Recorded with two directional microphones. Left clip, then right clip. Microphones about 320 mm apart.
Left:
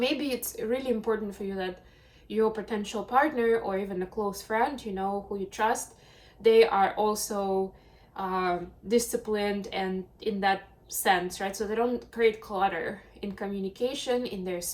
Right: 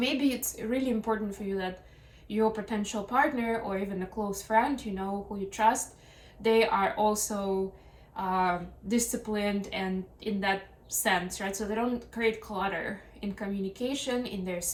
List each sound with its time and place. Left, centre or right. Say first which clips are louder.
0.0 s speech: left 1 dB; centre